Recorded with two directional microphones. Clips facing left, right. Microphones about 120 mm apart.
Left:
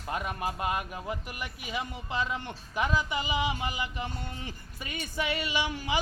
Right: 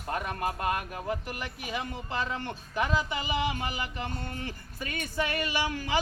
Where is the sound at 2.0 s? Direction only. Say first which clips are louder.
Left 1 dB; 15° left (ahead or behind).